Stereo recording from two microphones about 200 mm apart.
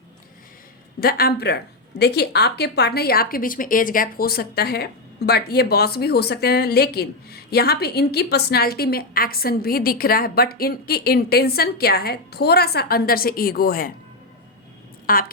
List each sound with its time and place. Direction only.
0.9 s a woman's voice: 50° left (ahead or behind)
15.0 s a woman's voice: 45° left (ahead or behind)